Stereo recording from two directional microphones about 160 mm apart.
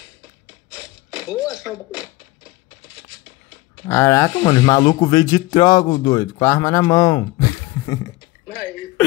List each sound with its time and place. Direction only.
3.8 s speech: 20° left (ahead or behind)